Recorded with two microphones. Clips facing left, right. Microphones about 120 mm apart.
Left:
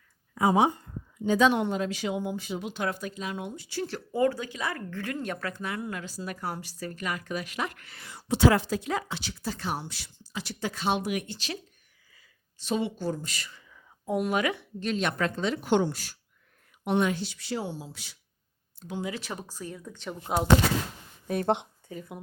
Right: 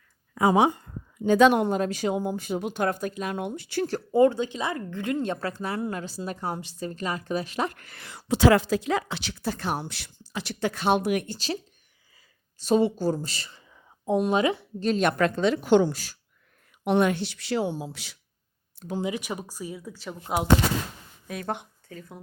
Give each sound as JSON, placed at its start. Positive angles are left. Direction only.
{"t": 0.3, "sound": "a woman's voice", "side_deg": -90}
{"t": 1.6, "sound": "speech", "side_deg": -45}
{"t": 4.1, "sound": "speech", "side_deg": -25}
{"t": 7.9, "sound": "speech", "side_deg": -75}
{"t": 11.3, "sound": "speech", "side_deg": -35}
{"t": 12.1, "sound": "a sound", "side_deg": -40}
{"t": 14.8, "sound": "speech", "side_deg": -35}
{"t": 15.0, "sound": "speech", "side_deg": -70}
{"t": 16.8, "sound": "speech", "side_deg": -65}
{"t": 19.0, "sound": "speech", "side_deg": -15}
{"t": 21.4, "sound": "speech", "side_deg": 20}